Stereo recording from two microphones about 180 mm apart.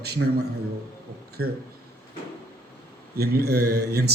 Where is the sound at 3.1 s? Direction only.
60° right (ahead or behind).